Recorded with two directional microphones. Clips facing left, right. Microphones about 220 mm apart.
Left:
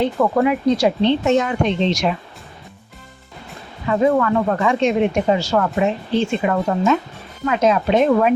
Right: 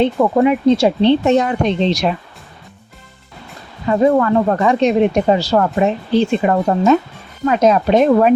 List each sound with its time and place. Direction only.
0.2 s speech: 20° right (ahead or behind)
3.8 s speech: 35° right (ahead or behind)